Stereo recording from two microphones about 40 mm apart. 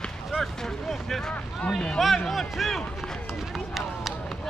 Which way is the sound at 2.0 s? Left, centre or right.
Centre.